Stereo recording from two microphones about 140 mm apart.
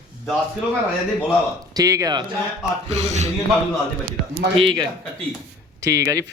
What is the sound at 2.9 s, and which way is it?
Speech, 55° right (ahead or behind).